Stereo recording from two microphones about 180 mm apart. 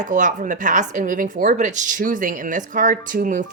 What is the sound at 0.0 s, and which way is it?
Speech, 45° right (ahead or behind).